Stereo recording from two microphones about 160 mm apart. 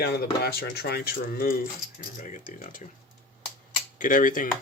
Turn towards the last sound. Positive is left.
turn(degrees=55)  # may be behind; listen again after turning